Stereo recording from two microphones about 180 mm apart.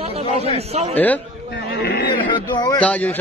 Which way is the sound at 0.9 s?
10° left (ahead or behind).